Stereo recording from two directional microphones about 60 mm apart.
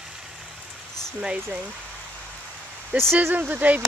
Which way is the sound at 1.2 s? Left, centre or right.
Centre.